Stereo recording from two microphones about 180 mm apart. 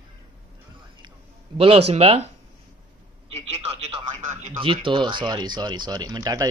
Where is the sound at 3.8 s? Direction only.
35° right (ahead or behind).